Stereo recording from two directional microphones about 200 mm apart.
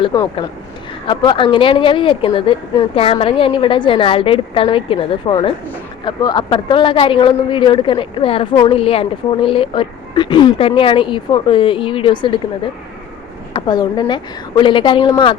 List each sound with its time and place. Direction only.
0.0 s speech: 20° left (ahead or behind)
13.5 s speech: 20° left (ahead or behind)